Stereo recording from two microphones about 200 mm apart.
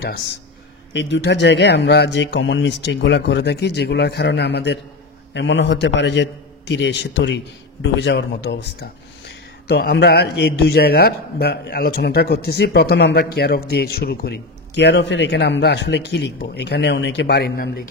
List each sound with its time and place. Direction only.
0.9 s a man's voice: 60° left (ahead or behind)